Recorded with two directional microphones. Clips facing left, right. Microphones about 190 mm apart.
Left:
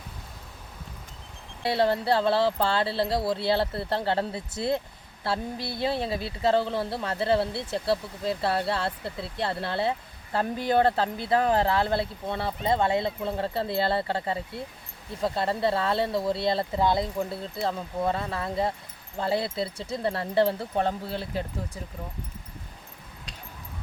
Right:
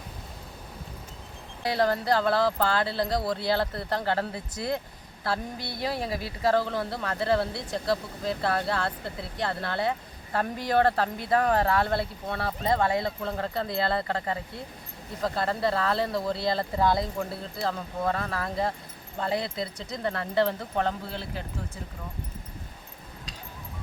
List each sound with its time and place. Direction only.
1.7 s a woman's voice: 25° left (ahead or behind)